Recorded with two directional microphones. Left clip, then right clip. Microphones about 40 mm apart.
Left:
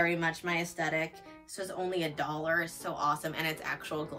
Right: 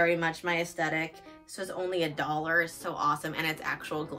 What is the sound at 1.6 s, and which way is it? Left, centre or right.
Speech, right.